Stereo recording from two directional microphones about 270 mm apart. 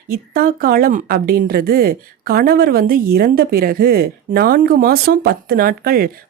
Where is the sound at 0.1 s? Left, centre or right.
Right.